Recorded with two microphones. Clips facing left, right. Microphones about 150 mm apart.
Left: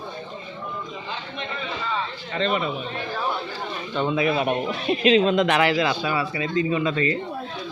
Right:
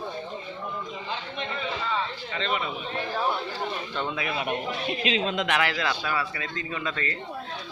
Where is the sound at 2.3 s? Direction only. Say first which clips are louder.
Left 6 dB; 40° left (ahead or behind).